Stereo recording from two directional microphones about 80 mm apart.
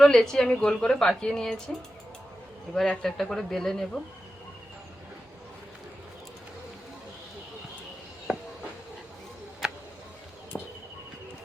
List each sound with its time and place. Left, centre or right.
0.0 s a woman's voice: centre
2.7 s a man's voice: centre
9.6 s tick-tock: centre
10.5 s a sound: centre